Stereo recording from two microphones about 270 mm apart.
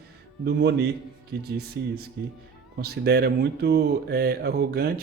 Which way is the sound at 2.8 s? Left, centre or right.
Right.